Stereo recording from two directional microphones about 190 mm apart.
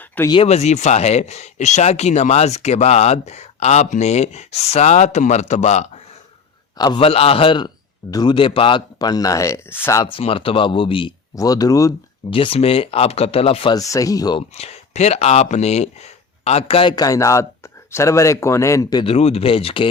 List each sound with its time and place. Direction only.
0.3 s speech: 30° left (ahead or behind)
6.7 s speech: 25° left (ahead or behind)
10.1 s speech: 30° left (ahead or behind)
12.3 s speech: 30° left (ahead or behind)
13.7 s speech: 20° left (ahead or behind)
14.5 s speech: 35° left (ahead or behind)